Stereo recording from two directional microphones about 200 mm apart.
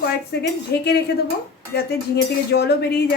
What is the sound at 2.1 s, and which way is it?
Speech, 55° left (ahead or behind).